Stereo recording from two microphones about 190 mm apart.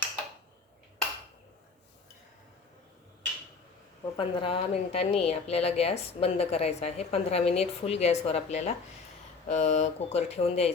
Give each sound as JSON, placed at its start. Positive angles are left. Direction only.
{"t": 4.0, "sound": "a woman's voice", "side_deg": 25}